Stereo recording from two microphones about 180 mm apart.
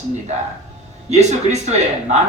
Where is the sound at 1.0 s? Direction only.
40° right (ahead or behind).